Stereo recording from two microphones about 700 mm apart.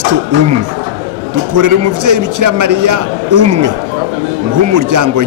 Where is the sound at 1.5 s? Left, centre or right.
Right.